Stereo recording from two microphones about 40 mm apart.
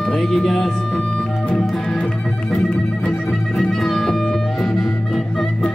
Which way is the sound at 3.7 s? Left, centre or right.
Centre.